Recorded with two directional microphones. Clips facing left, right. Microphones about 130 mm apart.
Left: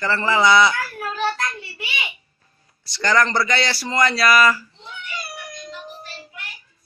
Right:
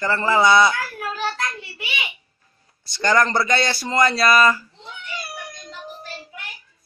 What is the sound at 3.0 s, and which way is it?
Speech, 20° right (ahead or behind).